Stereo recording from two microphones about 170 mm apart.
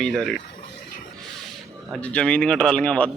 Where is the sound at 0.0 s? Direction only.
5° left (ahead or behind).